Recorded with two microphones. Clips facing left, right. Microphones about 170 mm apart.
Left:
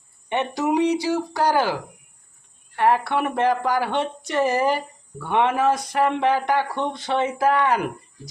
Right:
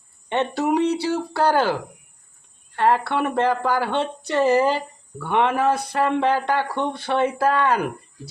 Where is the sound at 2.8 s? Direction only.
15° left (ahead or behind).